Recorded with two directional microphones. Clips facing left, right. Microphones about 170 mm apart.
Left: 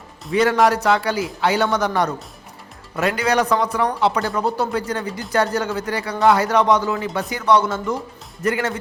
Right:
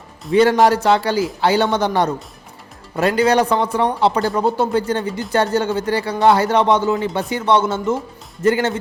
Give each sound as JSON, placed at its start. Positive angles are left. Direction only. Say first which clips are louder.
{"t": 0.3, "sound": "speech", "louder": "right 3 dB", "side_deg": -30}